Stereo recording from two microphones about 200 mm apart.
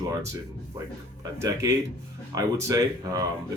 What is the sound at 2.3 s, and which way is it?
Speech, 15° right (ahead or behind).